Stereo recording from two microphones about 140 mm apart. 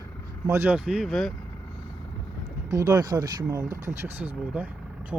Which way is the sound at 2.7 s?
25° right (ahead or behind).